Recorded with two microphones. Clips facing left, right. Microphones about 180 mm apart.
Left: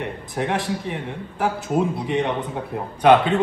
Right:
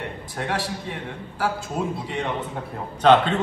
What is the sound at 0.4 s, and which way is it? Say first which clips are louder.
Speech: left 4 dB; 20° left (ahead or behind).